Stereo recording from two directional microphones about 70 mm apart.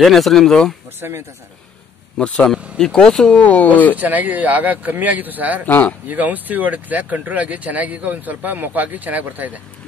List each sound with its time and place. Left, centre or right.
0.0 s speech: centre
2.1 s speech: centre
3.3 s speech: left
3.9 s speech: right
5.7 s speech: left
6.0 s speech: right